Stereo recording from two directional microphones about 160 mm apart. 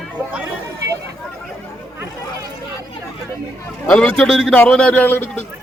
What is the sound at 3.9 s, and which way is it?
A man's voice, 5° left (ahead or behind).